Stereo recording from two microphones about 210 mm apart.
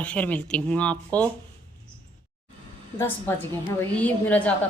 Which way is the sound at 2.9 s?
10° left (ahead or behind).